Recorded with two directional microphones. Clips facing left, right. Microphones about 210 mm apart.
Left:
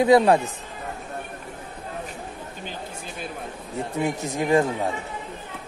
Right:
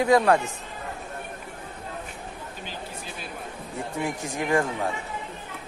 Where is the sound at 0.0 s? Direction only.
20° left (ahead or behind).